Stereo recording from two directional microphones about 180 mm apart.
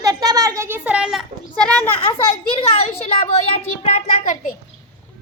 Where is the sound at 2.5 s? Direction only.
30° left (ahead or behind).